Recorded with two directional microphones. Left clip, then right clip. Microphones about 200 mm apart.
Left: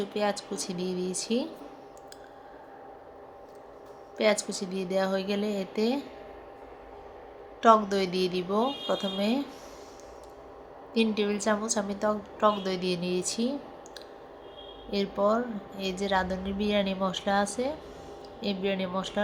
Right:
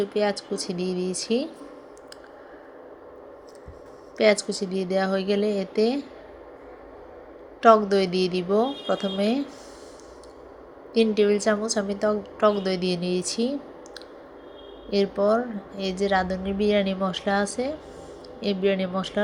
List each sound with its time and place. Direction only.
0.0 s a woman's voice: 10° right (ahead or behind)
4.2 s a woman's voice: 15° right (ahead or behind)
7.6 s a woman's voice: 10° right (ahead or behind)
10.9 s a woman's voice: 15° right (ahead or behind)
14.8 s a woman's voice: 10° right (ahead or behind)